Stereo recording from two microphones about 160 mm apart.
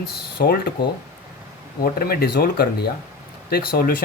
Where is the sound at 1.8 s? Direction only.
70° left (ahead or behind).